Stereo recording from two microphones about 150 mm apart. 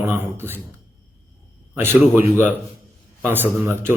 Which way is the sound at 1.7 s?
15° right (ahead or behind).